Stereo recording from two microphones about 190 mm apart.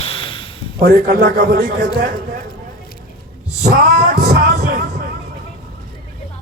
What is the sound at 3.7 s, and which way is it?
Male singing, 55° right (ahead or behind).